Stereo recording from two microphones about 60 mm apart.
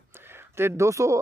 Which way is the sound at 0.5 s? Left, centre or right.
Right.